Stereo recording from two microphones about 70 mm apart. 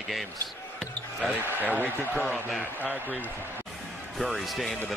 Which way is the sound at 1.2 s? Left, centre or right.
Right.